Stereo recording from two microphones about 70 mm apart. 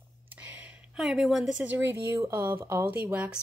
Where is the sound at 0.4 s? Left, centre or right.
Centre.